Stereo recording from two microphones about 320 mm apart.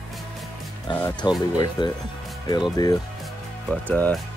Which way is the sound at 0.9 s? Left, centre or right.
Centre.